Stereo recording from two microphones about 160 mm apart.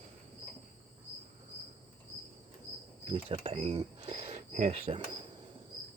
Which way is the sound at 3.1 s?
35° right (ahead or behind).